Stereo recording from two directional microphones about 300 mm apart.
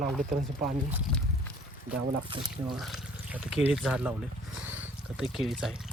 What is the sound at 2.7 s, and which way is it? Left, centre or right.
Speech, centre.